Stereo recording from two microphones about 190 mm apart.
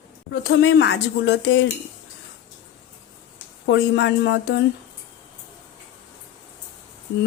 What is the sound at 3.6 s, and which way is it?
Speech, 70° left (ahead or behind).